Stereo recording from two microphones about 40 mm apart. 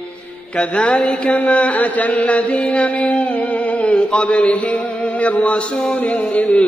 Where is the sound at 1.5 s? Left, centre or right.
Left.